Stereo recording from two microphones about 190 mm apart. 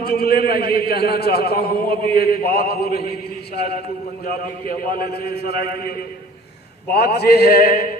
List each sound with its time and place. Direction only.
0.0 s a man's voice: 55° left (ahead or behind)
4.9 s a man's voice: 55° left (ahead or behind)
6.9 s a man's voice: 60° left (ahead or behind)